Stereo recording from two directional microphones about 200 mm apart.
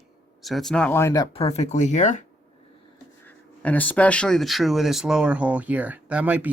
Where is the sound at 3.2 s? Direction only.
10° left (ahead or behind).